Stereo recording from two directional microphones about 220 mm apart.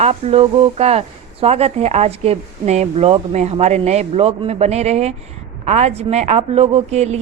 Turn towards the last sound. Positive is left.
turn(degrees=-30)  # may be behind; listen again after turning